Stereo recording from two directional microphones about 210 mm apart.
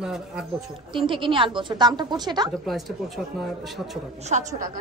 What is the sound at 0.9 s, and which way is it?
A woman's voice, 25° right (ahead or behind).